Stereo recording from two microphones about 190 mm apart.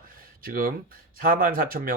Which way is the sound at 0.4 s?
50° right (ahead or behind).